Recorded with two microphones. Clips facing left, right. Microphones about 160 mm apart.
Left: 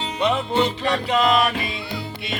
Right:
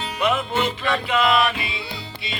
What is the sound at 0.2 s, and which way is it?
Music, 30° left (ahead or behind).